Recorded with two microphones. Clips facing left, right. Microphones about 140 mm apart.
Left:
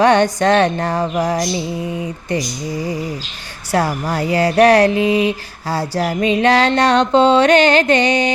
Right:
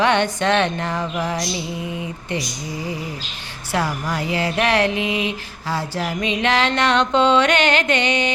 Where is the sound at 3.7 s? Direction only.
40° left (ahead or behind).